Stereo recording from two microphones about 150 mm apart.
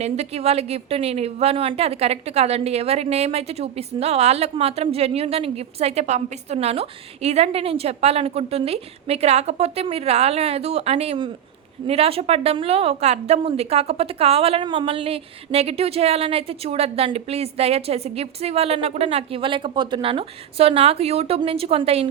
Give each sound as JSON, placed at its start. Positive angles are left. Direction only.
{"t": 0.0, "sound": "a woman's voice", "side_deg": -45}